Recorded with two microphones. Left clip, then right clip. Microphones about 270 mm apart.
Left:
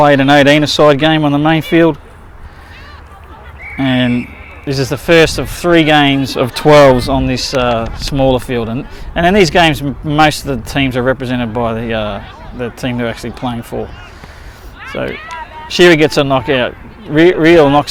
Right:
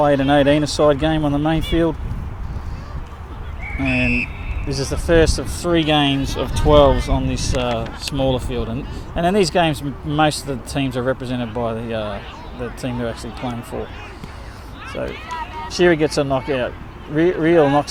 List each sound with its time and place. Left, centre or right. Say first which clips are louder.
0.0 s speech: left 7 dB; left
3.8 s speech: left 4 dB; left
15.0 s speech: left 5 dB; left